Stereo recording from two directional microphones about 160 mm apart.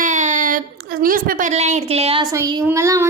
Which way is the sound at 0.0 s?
50° right (ahead or behind).